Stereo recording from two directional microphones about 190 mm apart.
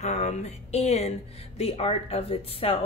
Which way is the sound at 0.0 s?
35° left (ahead or behind).